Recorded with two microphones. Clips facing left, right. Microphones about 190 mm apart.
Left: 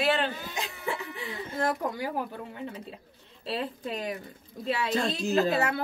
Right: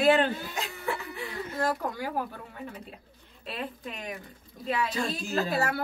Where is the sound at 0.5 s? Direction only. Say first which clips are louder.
Even; 15° left (ahead or behind).